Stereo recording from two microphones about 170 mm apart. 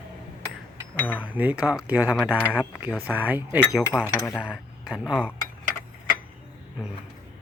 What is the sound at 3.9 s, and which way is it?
Speech, 20° left (ahead or behind).